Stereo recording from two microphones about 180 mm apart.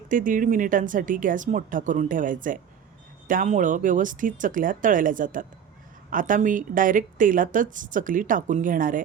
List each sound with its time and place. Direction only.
0.1 s speech: 50° right (ahead or behind)